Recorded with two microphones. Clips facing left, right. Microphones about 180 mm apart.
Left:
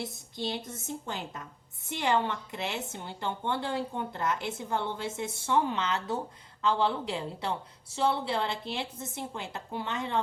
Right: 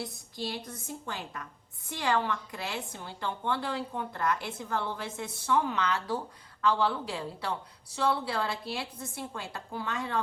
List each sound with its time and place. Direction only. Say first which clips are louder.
0.0 s a woman's voice: left 1 dB; 20° left (ahead or behind)